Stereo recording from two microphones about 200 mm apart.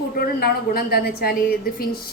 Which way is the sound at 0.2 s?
50° left (ahead or behind).